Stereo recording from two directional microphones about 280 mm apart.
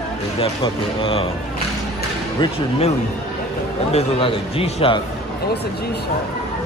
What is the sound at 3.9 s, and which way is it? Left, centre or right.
A man's voice, left.